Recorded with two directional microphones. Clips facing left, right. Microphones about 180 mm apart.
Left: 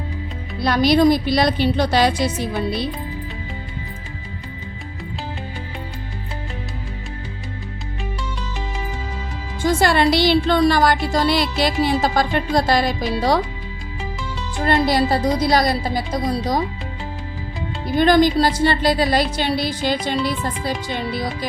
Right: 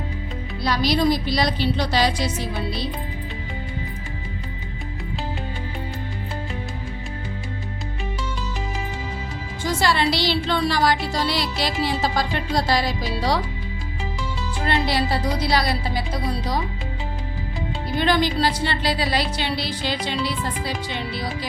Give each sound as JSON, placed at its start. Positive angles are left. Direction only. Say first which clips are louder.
{"t": 0.6, "sound": "music", "louder": "left 6 dB", "side_deg": 55}
{"t": 9.6, "sound": "music", "louder": "left 5 dB", "side_deg": 50}
{"t": 14.6, "sound": "music", "louder": "left 5 dB", "side_deg": 45}
{"t": 17.9, "sound": "music", "louder": "left 7 dB", "side_deg": 45}